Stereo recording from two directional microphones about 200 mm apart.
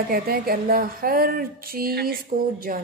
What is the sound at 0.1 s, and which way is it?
A woman's voice, 50° right (ahead or behind).